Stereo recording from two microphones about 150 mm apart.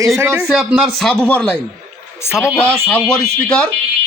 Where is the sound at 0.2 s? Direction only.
15° right (ahead or behind).